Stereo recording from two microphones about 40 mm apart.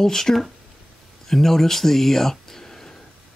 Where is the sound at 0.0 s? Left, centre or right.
Centre.